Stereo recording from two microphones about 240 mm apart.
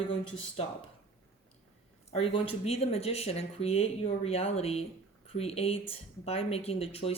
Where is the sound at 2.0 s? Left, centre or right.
Left.